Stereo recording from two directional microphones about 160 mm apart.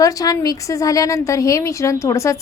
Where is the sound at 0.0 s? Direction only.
20° left (ahead or behind).